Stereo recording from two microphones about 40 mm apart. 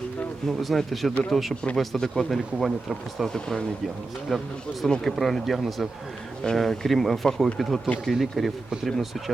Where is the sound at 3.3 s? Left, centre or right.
Centre.